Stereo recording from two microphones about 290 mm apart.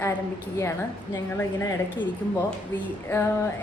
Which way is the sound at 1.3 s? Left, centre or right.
Centre.